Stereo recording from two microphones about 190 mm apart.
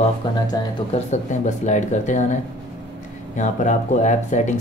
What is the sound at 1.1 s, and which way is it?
Speech, 40° left (ahead or behind).